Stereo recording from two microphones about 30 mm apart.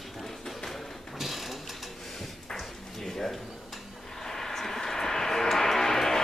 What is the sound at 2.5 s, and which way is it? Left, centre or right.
Drawer open or close, centre.